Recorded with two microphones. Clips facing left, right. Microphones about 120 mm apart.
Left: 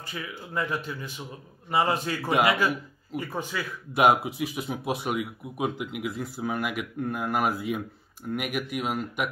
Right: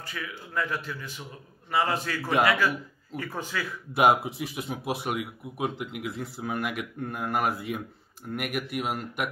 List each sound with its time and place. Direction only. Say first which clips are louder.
0.0 s speech: left 1 dB; 20° left (ahead or behind)
3.9 s speech: left 1 dB; centre (ahead or behind)